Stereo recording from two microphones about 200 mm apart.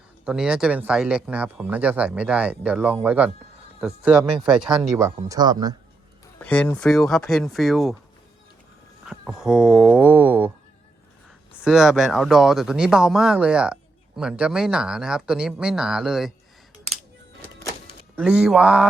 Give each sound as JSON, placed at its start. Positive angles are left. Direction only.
{"t": 0.3, "sound": "speech", "side_deg": -5}
{"t": 4.9, "sound": "speech", "side_deg": -15}
{"t": 6.4, "sound": "speech", "side_deg": 5}
{"t": 9.0, "sound": "speech", "side_deg": -5}
{"t": 11.6, "sound": "speech", "side_deg": -5}
{"t": 18.2, "sound": "speech", "side_deg": -5}